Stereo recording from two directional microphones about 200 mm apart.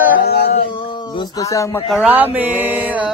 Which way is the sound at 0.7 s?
25° left (ahead or behind).